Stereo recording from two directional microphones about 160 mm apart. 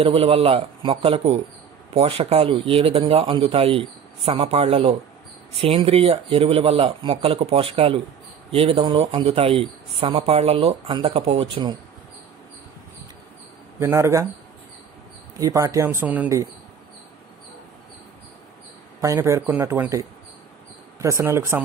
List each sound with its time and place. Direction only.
0.0 s speech: 35° right (ahead or behind)
13.7 s speech: 15° right (ahead or behind)
15.3 s speech: 20° right (ahead or behind)
18.9 s speech: 15° right (ahead or behind)